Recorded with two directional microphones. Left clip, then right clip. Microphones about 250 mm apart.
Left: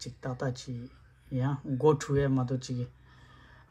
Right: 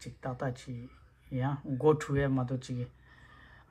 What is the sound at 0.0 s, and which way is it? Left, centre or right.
Speech, centre.